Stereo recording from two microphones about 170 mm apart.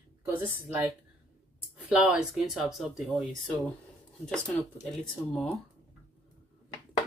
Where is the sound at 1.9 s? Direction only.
5° right (ahead or behind).